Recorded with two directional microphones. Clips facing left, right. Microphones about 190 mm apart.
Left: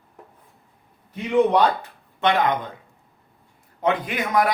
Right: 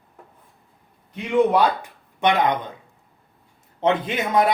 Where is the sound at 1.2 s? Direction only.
10° right (ahead or behind).